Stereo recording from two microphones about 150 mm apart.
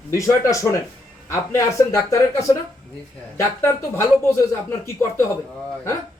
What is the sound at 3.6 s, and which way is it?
Speech, 15° left (ahead or behind).